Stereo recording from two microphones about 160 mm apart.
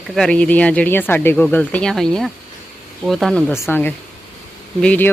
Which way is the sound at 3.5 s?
15° left (ahead or behind).